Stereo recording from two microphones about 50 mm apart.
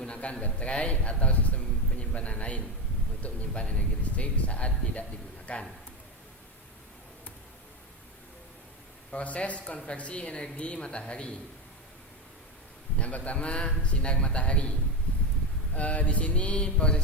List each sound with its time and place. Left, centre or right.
0.0 s a man's voice: left
9.1 s a man's voice: left
13.0 s a man's voice: left